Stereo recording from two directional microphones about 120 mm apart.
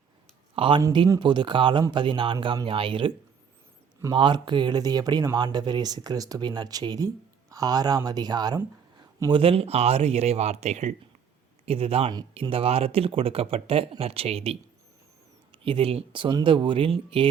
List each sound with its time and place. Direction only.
0.5 s speech: 45° right (ahead or behind)
4.1 s speech: 40° right (ahead or behind)
9.3 s speech: 50° right (ahead or behind); by 10.9 s 70° right (ahead or behind)
11.6 s speech: 55° right (ahead or behind)